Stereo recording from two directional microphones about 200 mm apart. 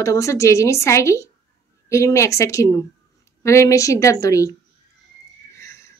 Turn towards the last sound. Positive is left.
turn(degrees=15)  # may be behind; listen again after turning